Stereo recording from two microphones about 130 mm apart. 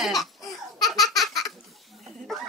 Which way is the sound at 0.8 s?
Centre (ahead or behind).